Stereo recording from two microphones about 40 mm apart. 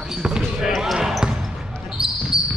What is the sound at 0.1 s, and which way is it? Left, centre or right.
Basketball bounce, centre.